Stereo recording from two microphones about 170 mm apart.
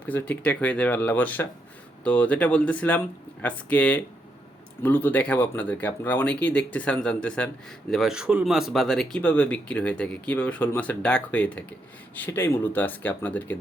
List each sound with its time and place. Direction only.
0.0 s speech: 10° left (ahead or behind)